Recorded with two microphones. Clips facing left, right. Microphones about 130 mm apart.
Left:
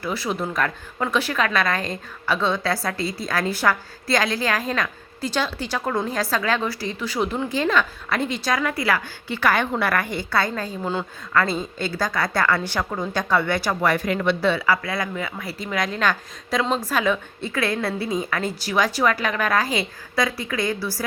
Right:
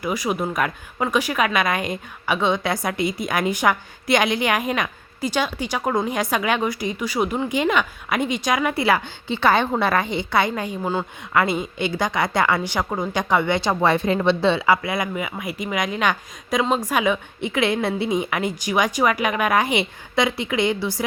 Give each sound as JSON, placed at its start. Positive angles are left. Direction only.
{"t": 0.0, "sound": "a woman's voice", "side_deg": -15}